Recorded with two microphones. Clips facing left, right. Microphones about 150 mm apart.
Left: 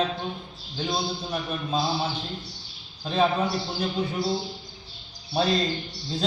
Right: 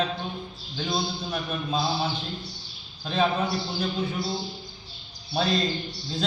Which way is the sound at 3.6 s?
20° left (ahead or behind).